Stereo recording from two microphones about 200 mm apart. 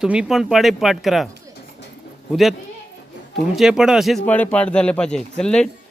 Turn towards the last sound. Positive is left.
turn(degrees=5)  # may be behind; listen again after turning